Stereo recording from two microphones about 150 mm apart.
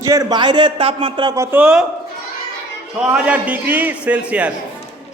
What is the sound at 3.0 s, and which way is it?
A man's voice, 10° right (ahead or behind).